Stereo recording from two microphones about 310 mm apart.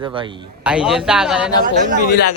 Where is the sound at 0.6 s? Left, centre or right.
Centre.